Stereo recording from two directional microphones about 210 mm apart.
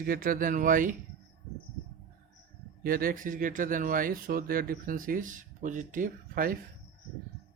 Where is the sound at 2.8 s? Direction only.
45° right (ahead or behind).